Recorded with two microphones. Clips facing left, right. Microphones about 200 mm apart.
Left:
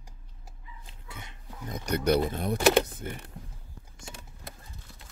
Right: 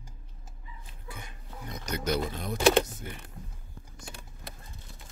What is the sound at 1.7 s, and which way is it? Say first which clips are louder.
Speech: left 6 dB; 60° left (ahead or behind).